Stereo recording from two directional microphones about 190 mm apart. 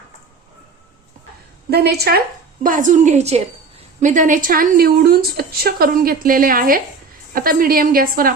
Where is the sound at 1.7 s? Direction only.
55° right (ahead or behind).